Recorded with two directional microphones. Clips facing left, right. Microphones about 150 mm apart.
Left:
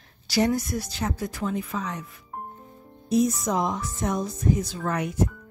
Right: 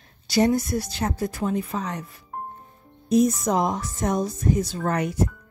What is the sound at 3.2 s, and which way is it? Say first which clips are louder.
A woman's voice: right 3 dB; 45° right (ahead or behind).